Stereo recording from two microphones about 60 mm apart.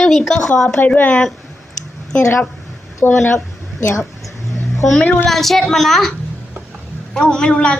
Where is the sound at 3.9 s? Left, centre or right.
Left.